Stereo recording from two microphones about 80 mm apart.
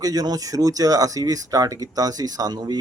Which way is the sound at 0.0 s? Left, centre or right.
Right.